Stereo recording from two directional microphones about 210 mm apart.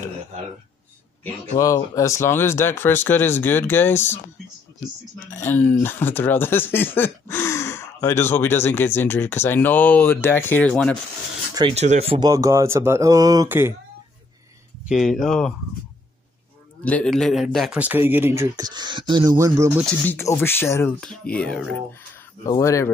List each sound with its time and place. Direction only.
1.6 s speech: 15° left (ahead or behind)
5.3 s speech: 10° left (ahead or behind)
11.5 s speech: 25° right (ahead or behind)
12.3 s speech: 15° right (ahead or behind)
14.9 s speech: centre (ahead or behind)
16.8 s speech: 5° left (ahead or behind); by 19.7 s 15° right (ahead or behind)
20.1 s speech: 10° left (ahead or behind)